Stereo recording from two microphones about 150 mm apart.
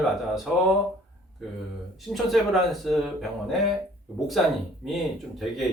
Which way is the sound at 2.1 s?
Centre (ahead or behind).